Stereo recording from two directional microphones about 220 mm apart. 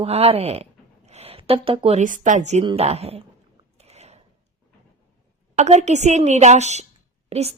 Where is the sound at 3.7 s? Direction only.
30° right (ahead or behind).